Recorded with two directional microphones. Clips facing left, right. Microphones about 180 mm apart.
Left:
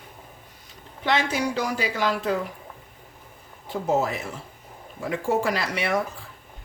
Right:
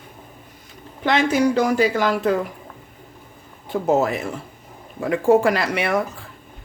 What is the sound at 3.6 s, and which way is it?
Speech, 60° right (ahead or behind).